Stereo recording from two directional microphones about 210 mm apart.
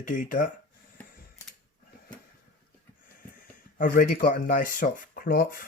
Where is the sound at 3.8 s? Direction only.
40° left (ahead or behind).